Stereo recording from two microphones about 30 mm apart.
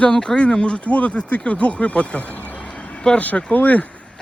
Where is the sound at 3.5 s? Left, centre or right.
Left.